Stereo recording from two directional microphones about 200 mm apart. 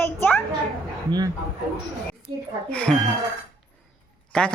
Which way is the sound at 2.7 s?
5° left (ahead or behind).